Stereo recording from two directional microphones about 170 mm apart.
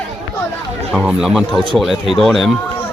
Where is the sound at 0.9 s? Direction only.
5° right (ahead or behind).